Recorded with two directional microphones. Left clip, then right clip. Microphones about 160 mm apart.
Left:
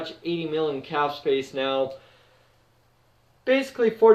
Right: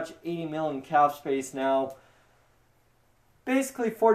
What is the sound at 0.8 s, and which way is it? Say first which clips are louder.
Speech: right 1 dB; 50° right (ahead or behind).